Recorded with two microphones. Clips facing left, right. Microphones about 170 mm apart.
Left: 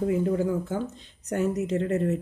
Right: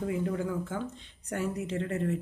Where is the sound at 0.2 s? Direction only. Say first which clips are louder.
Left 6 dB; 30° left (ahead or behind).